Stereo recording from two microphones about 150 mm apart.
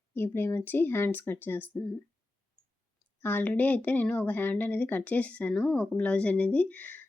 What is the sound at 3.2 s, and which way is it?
A woman's voice, 15° left (ahead or behind).